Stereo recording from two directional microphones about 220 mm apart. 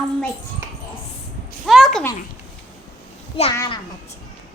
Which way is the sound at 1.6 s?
Centre (ahead or behind).